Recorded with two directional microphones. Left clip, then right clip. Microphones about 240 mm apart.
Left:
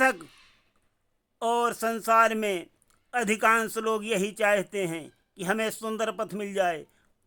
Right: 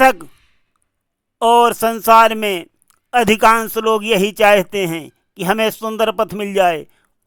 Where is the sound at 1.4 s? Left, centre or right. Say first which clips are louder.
Right 14 dB; right.